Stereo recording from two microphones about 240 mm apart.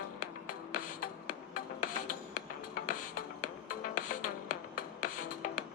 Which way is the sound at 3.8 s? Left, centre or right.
Left.